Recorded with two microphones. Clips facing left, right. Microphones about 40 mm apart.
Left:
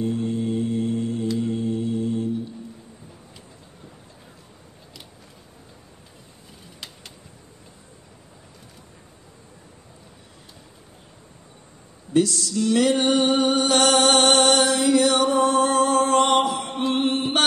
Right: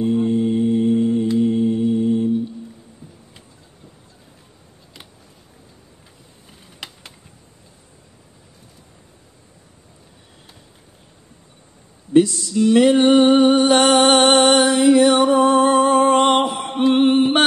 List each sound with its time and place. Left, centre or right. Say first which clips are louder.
0.0 s music: right 7 dB; right
12.1 s a sound: right 6 dB; centre
13.0 s music: right 7 dB; right
16.8 s chant: right 9 dB; right